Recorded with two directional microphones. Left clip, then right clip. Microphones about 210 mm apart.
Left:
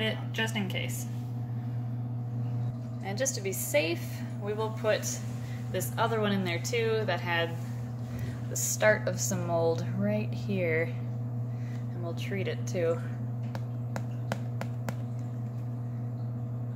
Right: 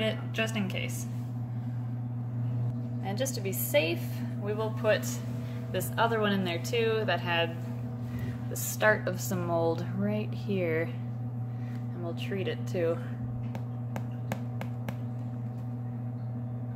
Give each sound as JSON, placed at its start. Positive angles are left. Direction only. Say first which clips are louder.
{"t": 0.0, "sound": "speech", "louder": "right 1 dB", "side_deg": -5}
{"t": 3.1, "sound": "speech", "louder": "left 2 dB", "side_deg": -10}
{"t": 8.5, "sound": "speech", "louder": "left 1 dB", "side_deg": -10}
{"t": 12.3, "sound": "speech", "louder": "right 1 dB", "side_deg": -10}